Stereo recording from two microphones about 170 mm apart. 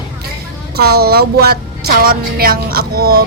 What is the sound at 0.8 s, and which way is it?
Speech, 70° right (ahead or behind).